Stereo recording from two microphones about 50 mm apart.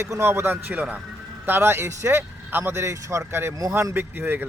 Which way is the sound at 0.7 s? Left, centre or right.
Right.